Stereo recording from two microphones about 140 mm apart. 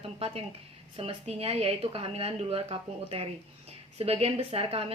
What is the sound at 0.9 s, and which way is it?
A woman's voice, 45° right (ahead or behind).